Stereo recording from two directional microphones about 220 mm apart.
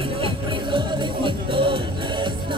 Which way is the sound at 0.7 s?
20° right (ahead or behind).